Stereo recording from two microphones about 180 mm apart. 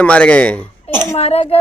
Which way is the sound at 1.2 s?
35° left (ahead or behind).